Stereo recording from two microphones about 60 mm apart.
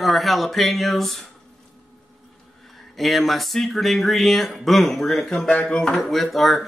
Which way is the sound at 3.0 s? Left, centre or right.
Centre.